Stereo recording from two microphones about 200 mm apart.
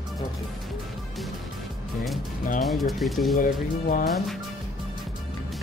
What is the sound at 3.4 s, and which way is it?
Speech, 40° left (ahead or behind).